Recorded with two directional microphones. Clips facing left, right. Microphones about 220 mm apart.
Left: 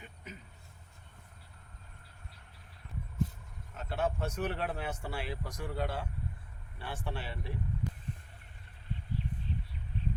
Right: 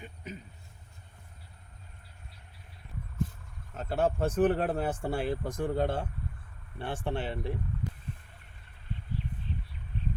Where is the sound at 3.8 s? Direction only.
40° right (ahead or behind).